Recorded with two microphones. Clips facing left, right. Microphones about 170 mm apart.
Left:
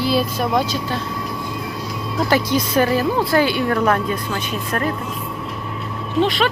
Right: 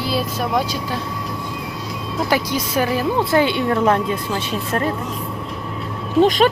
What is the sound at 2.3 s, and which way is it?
Speech, 10° right (ahead or behind).